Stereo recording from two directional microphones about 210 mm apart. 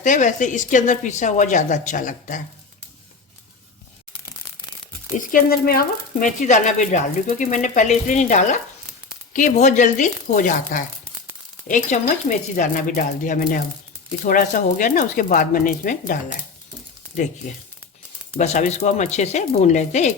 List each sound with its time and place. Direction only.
0.0 s speech: 35° left (ahead or behind)
5.1 s speech: 40° left (ahead or behind)
18.3 s speech: 35° left (ahead or behind)